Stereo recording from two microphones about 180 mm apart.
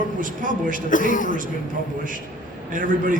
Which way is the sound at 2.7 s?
50° right (ahead or behind).